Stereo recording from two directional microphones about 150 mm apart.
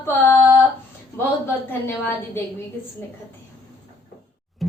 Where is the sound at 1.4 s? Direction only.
15° left (ahead or behind).